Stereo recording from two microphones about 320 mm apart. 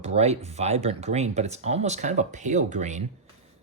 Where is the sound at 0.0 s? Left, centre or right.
Centre.